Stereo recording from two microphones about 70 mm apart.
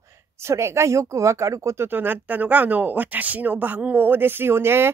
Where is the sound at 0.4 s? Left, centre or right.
Right.